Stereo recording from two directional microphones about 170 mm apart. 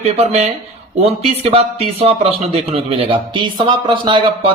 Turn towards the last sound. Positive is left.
turn(degrees=-30)  # may be behind; listen again after turning